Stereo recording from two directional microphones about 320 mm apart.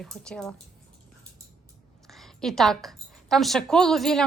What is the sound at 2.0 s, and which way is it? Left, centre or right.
A woman's voice, centre.